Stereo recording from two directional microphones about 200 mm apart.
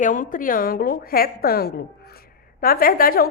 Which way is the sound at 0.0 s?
40° left (ahead or behind).